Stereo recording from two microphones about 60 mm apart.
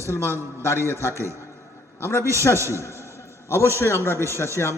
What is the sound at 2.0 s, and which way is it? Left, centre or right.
Speech, left.